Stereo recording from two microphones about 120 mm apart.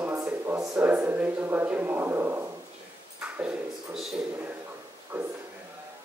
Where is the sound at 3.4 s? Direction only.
10° right (ahead or behind).